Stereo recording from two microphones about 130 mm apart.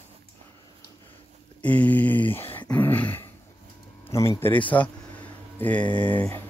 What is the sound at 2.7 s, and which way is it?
Dog, 15° left (ahead or behind).